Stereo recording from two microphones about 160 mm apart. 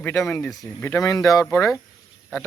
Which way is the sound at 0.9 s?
20° left (ahead or behind).